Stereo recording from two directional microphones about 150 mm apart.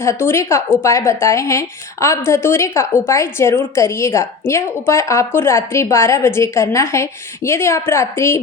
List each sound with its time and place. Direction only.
0.0 s a woman's voice: 15° left (ahead or behind)